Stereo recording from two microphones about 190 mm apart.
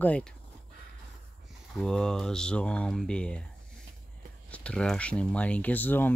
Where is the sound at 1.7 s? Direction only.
5° left (ahead or behind).